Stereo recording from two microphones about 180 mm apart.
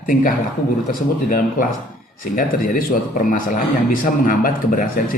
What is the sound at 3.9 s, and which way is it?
Speech, 50° left (ahead or behind).